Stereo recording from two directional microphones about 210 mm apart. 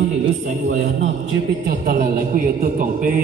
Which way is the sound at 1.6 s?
45° right (ahead or behind).